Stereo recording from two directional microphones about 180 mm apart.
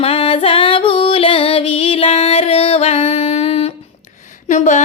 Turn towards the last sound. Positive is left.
turn(degrees=40)  # may be behind; listen again after turning